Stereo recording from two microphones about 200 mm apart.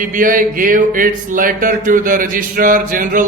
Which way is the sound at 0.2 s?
40° right (ahead or behind).